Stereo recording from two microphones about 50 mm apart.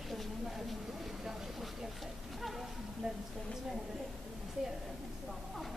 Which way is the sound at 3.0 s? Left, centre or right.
Centre.